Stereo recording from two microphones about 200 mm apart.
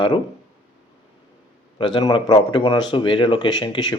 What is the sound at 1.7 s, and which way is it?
A man's voice, 25° left (ahead or behind).